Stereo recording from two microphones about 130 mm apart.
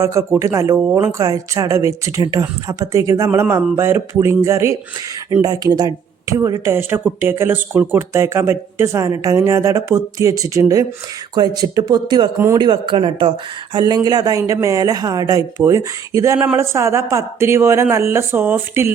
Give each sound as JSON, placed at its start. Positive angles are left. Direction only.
{"t": 0.0, "sound": "speech", "side_deg": -20}